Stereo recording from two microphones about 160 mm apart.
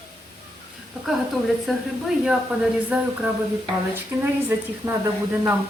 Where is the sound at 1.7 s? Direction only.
5° right (ahead or behind).